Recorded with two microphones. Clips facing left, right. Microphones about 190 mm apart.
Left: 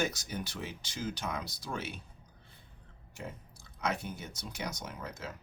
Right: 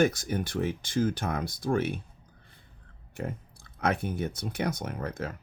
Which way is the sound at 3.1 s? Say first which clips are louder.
Right 8 dB; 55° right (ahead or behind).